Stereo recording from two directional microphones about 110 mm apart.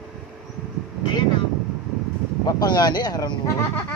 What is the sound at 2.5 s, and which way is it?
Speech, 40° left (ahead or behind).